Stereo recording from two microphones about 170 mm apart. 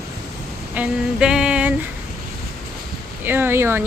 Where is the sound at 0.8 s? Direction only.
5° right (ahead or behind).